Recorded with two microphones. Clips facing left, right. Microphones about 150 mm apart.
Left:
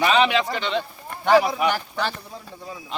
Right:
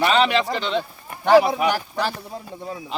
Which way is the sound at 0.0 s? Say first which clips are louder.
Right 1 dB; centre (ahead or behind).